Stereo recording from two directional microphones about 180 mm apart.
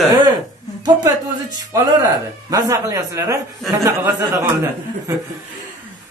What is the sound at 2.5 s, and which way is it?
Speech, 20° right (ahead or behind).